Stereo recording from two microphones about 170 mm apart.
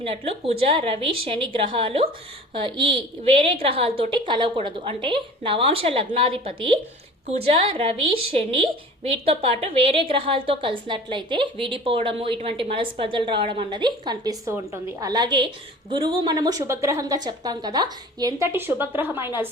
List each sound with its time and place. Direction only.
0.0 s a woman's voice: 35° right (ahead or behind); by 19.5 s 10° right (ahead or behind)